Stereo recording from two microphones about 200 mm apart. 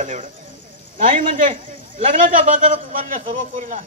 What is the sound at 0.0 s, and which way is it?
A man's voice, 40° right (ahead or behind).